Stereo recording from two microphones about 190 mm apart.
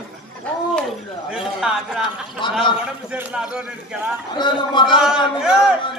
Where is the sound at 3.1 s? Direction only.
5° right (ahead or behind).